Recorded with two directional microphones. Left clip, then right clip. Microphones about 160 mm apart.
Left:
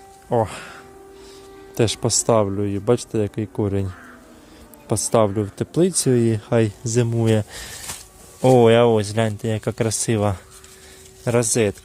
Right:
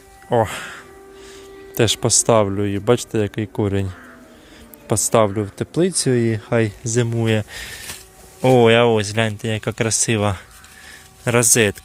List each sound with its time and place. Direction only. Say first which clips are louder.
0.3 s speech: right 3 dB; centre (ahead or behind)
1.7 s speech: right 3 dB; 5° left (ahead or behind)
4.9 s speech: right 2 dB; 5° left (ahead or behind)
5.2 s speech: right 1 dB; 20° left (ahead or behind)
11.2 s speech: right 3 dB; centre (ahead or behind)